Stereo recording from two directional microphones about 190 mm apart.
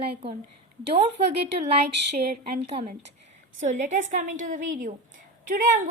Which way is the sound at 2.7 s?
35° right (ahead or behind).